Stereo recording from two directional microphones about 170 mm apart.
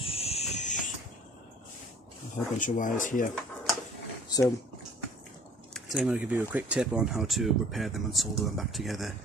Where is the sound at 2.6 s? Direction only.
50° left (ahead or behind).